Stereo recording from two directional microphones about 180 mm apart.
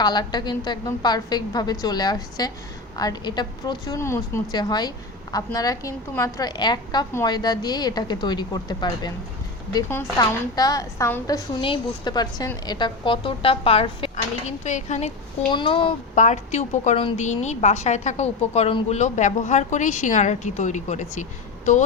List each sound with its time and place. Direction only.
0.0 s a woman's voice: 25° left (ahead or behind); by 15.1 s 40° left (ahead or behind)
15.4 s a woman's voice: 25° left (ahead or behind)
16.1 s a woman's voice: 40° left (ahead or behind)